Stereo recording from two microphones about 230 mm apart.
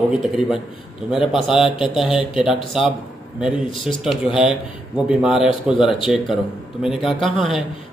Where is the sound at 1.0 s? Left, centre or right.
Centre.